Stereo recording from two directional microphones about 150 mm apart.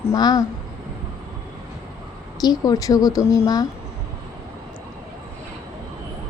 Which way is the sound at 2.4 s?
25° left (ahead or behind).